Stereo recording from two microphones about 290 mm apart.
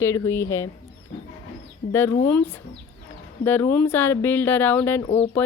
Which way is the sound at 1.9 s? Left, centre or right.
Centre.